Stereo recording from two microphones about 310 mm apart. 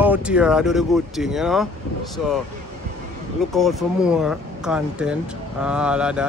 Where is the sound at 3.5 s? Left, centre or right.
Centre.